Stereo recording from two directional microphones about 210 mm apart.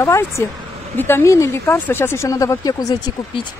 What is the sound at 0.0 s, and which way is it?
Speech, 15° left (ahead or behind).